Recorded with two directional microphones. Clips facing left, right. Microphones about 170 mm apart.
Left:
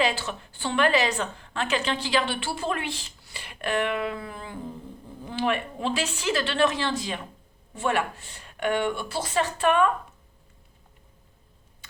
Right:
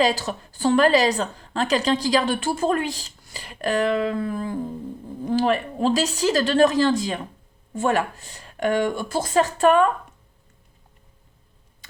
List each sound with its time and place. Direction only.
0.0 s a woman's voice: 40° right (ahead or behind)